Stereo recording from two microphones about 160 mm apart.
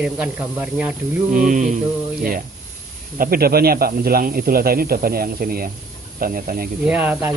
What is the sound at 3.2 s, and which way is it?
Speech, 70° right (ahead or behind).